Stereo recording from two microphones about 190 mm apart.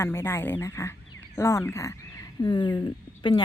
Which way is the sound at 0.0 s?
15° left (ahead or behind).